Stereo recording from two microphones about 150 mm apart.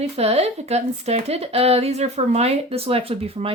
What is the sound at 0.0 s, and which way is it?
Speech, 45° right (ahead or behind).